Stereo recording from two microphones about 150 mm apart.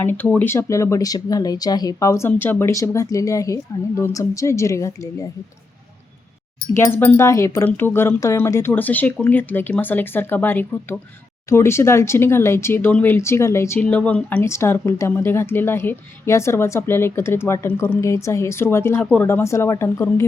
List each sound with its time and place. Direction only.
0.0 s speech: 10° left (ahead or behind)
6.7 s speech: 15° left (ahead or behind)